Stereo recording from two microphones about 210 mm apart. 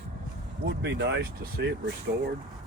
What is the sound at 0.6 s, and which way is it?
Speech, 55° right (ahead or behind).